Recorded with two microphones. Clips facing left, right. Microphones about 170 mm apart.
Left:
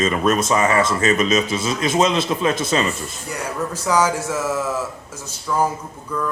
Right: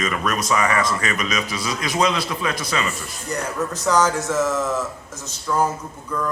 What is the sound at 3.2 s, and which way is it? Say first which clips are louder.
Speech: right 1 dB; 10° left (ahead or behind).